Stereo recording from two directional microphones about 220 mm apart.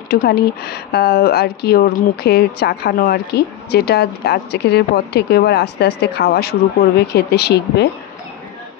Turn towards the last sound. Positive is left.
turn(degrees=50)  # may be behind; listen again after turning